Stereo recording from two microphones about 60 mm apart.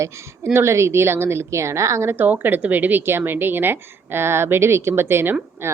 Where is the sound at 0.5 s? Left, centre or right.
Right.